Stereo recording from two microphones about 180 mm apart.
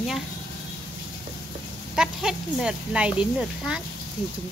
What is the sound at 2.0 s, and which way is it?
Speech, 5° right (ahead or behind).